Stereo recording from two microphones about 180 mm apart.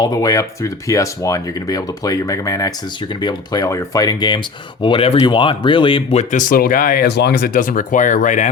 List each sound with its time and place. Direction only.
0.0 s speech: 20° left (ahead or behind)
6.3 s speech: 50° left (ahead or behind)